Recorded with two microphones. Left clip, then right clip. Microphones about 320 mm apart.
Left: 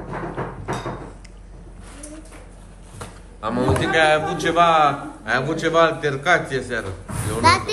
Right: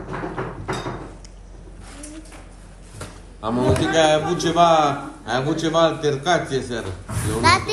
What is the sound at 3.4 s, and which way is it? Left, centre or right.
A man's voice, centre.